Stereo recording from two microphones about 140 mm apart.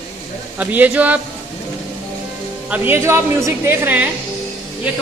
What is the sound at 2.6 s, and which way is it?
A woman's voice, 10° right (ahead or behind).